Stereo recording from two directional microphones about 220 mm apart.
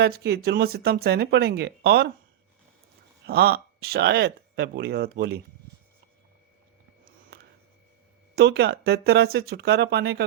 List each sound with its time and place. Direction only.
0.0 s speech: 50° right (ahead or behind)
3.2 s speech: 45° right (ahead or behind)
7.3 s a sound: 45° right (ahead or behind)
8.4 s speech: 50° right (ahead or behind)